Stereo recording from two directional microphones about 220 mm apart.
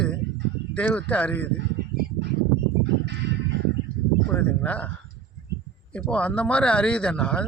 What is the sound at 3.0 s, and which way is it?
Music, 55° right (ahead or behind).